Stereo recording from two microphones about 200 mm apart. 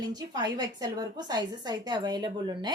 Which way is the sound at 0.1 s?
20° right (ahead or behind).